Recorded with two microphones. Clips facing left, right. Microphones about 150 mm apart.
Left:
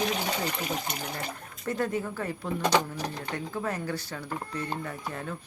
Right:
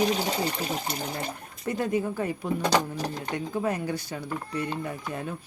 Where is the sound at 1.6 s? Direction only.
15° right (ahead or behind).